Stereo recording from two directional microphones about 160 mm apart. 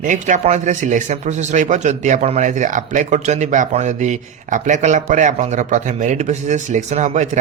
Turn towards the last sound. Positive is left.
turn(degrees=-50)  # may be behind; listen again after turning